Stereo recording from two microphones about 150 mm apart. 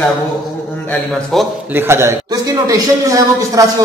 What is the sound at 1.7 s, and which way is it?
A man's voice, 15° right (ahead or behind).